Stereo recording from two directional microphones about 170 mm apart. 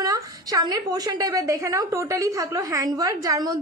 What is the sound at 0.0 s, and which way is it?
A woman's voice, 20° right (ahead or behind).